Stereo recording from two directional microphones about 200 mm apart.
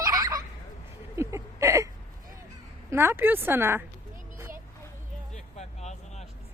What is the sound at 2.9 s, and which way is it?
Speech, 10° right (ahead or behind).